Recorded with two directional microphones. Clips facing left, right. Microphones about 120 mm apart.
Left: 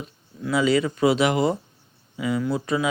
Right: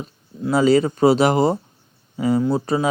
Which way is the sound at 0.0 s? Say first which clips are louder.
Right 5 dB; 40° right (ahead or behind).